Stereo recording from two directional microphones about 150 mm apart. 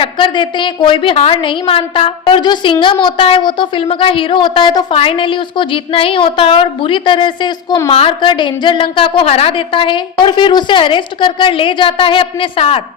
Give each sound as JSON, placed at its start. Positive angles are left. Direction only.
{"t": 0.0, "sound": "a woman's voice", "side_deg": 35}